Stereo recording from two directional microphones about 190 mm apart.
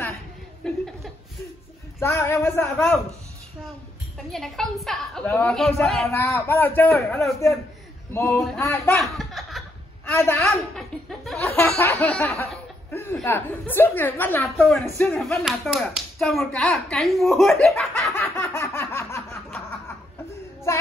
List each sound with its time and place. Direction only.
0.7 s chuckle: centre (ahead or behind)
2.0 s a woman's voice: 15° left (ahead or behind)
4.3 s speech: centre (ahead or behind)
6.1 s a woman's voice: 10° left (ahead or behind)
9.0 s chuckle: centre (ahead or behind)
10.0 s a woman's voice: 15° left (ahead or behind)
10.8 s laughter: centre (ahead or behind)
11.4 s a sound: 15° left (ahead or behind)
11.7 s a woman's voice: 10° left (ahead or behind)
18.3 s a sound: 15° left (ahead or behind)
20.7 s child singing: 15° left (ahead or behind)